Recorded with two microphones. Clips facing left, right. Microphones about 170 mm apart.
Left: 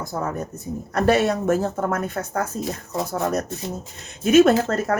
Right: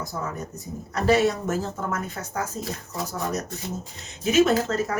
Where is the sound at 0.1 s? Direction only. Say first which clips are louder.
Left 6 dB; 50° left (ahead or behind).